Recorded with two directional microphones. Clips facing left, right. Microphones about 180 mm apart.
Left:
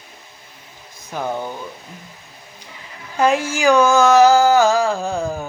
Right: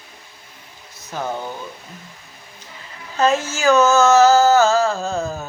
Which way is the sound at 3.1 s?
15° left (ahead or behind).